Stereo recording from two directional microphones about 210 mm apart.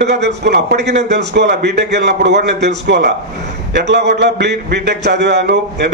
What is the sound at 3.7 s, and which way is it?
A man's voice, 55° right (ahead or behind).